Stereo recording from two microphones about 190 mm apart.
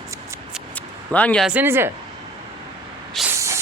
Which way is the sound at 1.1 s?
5° left (ahead or behind).